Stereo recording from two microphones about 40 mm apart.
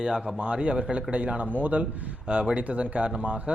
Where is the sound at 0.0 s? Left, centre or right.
Centre.